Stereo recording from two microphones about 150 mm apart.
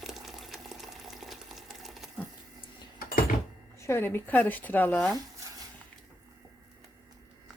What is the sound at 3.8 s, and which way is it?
Speech, 15° left (ahead or behind).